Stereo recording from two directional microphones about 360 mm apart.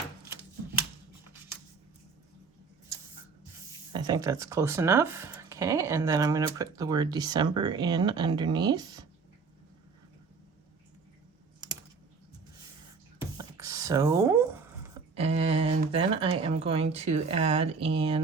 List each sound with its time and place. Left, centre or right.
3.9 s speech: centre
13.1 s a sound: centre
15.1 s speech: centre